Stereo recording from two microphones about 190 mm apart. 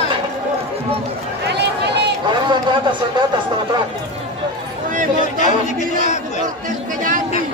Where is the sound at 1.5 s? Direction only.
65° right (ahead or behind).